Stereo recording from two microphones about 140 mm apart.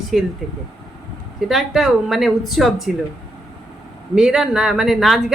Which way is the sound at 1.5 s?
Centre (ahead or behind).